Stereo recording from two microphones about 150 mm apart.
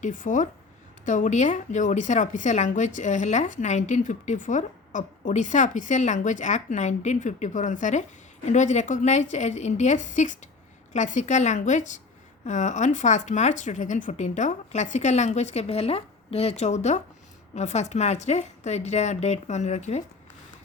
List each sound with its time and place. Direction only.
0.0 s a woman's voice: 60° left (ahead or behind)